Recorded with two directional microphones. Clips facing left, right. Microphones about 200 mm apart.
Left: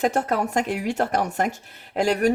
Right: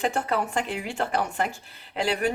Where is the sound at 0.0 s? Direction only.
40° left (ahead or behind).